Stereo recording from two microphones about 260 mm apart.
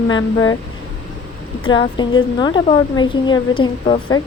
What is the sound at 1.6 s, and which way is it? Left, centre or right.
A woman's voice, centre.